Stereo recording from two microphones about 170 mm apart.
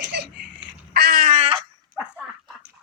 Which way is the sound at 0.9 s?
65° right (ahead or behind).